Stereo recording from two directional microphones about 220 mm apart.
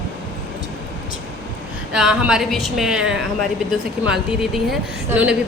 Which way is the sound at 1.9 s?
5° right (ahead or behind).